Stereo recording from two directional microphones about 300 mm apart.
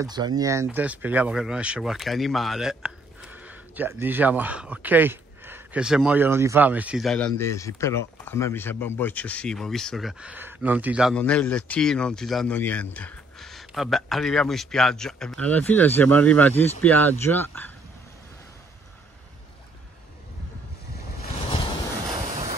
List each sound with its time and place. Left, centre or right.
0.0 s speech: centre
22.3 s vehicle: right